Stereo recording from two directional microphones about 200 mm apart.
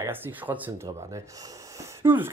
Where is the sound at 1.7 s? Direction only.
10° right (ahead or behind).